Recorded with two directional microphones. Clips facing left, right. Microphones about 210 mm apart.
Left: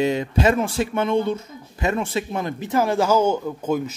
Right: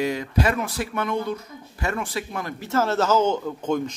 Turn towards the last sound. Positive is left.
turn(degrees=10)  # may be behind; listen again after turning